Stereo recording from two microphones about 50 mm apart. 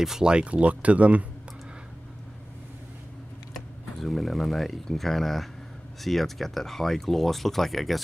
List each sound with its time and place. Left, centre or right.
0.0 s speech: centre; by 1.2 s right
3.5 s speech: centre